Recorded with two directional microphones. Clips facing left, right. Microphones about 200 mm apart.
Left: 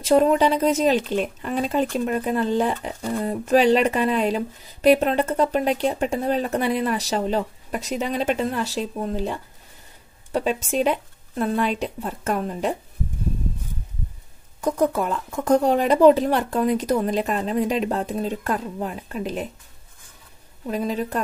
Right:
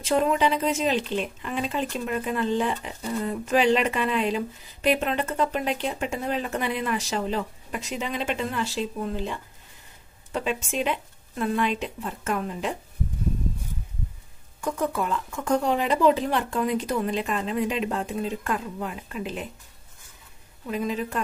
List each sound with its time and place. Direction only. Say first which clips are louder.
0.0 s speech: left 5 dB; 40° left (ahead or behind)
14.6 s speech: left 6 dB; 40° left (ahead or behind)
20.6 s speech: left 3 dB; 35° left (ahead or behind)